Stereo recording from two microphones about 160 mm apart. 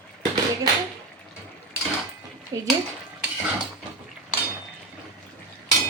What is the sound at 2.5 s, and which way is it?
Speech, 20° right (ahead or behind).